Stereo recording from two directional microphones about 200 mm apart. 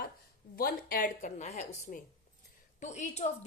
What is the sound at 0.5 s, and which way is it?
A woman's voice, 45° left (ahead or behind).